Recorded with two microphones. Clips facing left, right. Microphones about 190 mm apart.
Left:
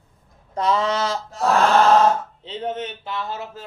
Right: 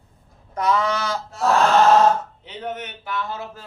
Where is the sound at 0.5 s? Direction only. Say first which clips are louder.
Left 1 dB; 25° left (ahead or behind).